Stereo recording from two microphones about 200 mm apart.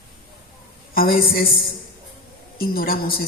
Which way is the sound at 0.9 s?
50° left (ahead or behind).